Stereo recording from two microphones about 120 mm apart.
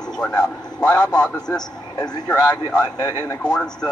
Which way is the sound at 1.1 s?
5° left (ahead or behind).